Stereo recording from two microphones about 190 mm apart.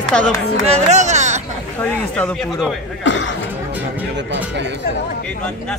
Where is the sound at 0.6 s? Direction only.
35° right (ahead or behind).